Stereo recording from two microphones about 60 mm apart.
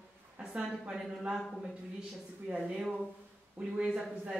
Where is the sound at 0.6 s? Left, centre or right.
Centre.